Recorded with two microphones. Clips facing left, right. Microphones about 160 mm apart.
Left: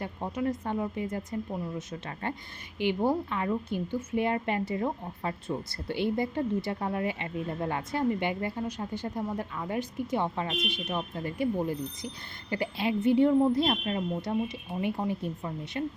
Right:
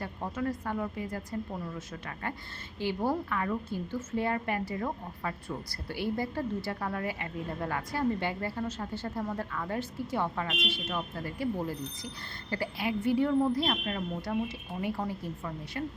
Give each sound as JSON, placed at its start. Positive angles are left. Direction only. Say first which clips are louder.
{"t": 0.0, "sound": "a woman's voice", "louder": "left 2 dB", "side_deg": 20}